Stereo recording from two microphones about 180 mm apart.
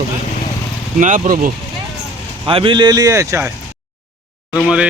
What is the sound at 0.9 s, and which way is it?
Speech, 45° right (ahead or behind).